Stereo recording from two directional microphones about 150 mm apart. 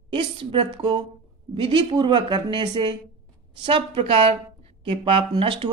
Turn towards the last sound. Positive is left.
turn(degrees=-35)  # may be behind; listen again after turning